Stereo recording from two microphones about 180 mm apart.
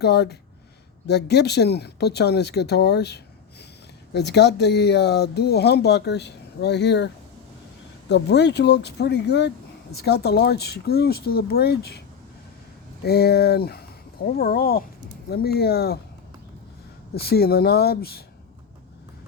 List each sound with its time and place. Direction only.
0.0 s speech: 65° left (ahead or behind)
8.1 s speech: 70° left (ahead or behind)
13.1 s speech: 60° left (ahead or behind)
17.2 s speech: 60° left (ahead or behind)